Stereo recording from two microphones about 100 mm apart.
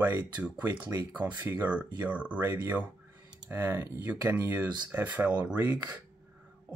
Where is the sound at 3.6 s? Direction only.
20° right (ahead or behind).